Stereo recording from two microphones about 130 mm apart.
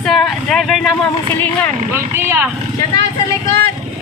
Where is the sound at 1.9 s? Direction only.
20° right (ahead or behind).